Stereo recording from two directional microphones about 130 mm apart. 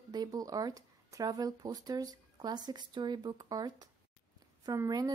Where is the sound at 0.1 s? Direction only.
30° right (ahead or behind).